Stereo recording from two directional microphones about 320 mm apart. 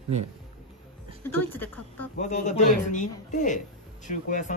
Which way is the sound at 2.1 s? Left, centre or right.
Left.